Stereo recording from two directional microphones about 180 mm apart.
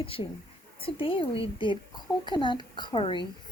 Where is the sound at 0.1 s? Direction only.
30° left (ahead or behind).